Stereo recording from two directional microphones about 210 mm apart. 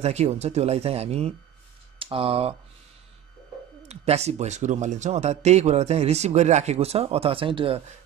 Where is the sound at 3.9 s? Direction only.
30° right (ahead or behind).